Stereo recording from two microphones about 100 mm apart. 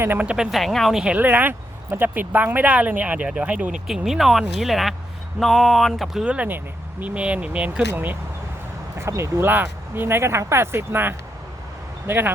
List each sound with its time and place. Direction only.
0.0 s speech: 20° right (ahead or behind)
0.5 s speech: centre (ahead or behind)
6.2 s speech: 15° right (ahead or behind)
9.0 s speech: 30° right (ahead or behind)